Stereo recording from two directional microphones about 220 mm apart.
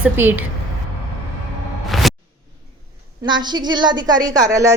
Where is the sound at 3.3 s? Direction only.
20° right (ahead or behind).